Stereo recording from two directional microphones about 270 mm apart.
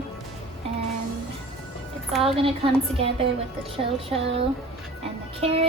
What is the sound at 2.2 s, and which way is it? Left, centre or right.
Speech, right.